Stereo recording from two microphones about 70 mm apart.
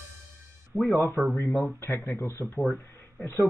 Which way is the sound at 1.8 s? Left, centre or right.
Left.